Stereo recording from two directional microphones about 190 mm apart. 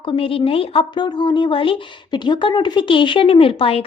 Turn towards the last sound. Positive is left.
turn(degrees=30)  # may be behind; listen again after turning